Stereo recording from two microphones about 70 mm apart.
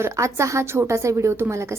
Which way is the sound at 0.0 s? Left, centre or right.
Right.